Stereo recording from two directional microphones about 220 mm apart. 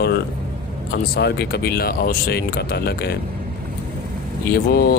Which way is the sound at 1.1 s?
45° left (ahead or behind).